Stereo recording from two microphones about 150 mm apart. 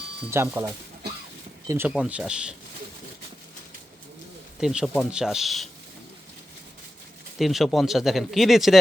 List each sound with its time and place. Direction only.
0.3 s speech: 15° right (ahead or behind)
1.9 s speech: 5° right (ahead or behind)
4.6 s speech: 5° right (ahead or behind)
7.3 s speech: centre (ahead or behind)